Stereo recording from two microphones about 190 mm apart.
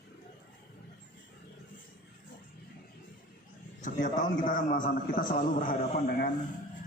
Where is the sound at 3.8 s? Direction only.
40° left (ahead or behind).